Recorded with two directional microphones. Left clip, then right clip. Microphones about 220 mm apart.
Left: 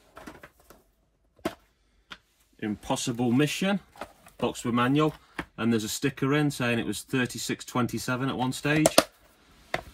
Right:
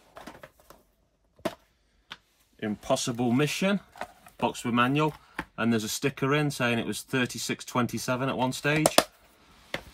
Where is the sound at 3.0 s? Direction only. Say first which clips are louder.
Left 1 dB; 30° right (ahead or behind).